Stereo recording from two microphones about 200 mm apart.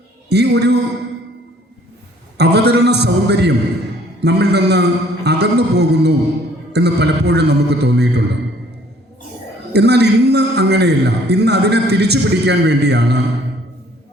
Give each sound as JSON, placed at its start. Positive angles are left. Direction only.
{"t": 0.3, "sound": "a man's voice", "side_deg": -55}
{"t": 2.4, "sound": "a man's voice", "side_deg": -55}
{"t": 9.7, "sound": "a man's voice", "side_deg": -55}